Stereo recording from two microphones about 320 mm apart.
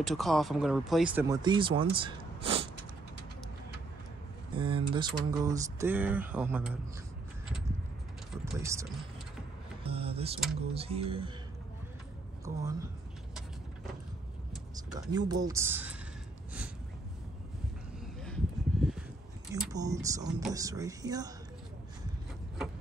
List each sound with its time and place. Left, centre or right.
0.0 s speech: centre
4.6 s speech: centre
8.3 s mechanisms: centre
9.8 s speech: centre
12.4 s speech: centre
15.0 s speech: centre
18.2 s a sound: centre
19.5 s speech: centre